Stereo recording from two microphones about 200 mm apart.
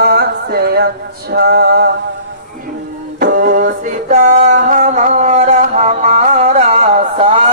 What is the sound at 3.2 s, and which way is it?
Music, 45° right (ahead or behind).